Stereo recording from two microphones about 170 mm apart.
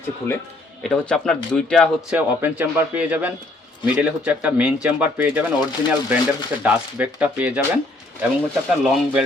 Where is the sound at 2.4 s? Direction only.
10° right (ahead or behind).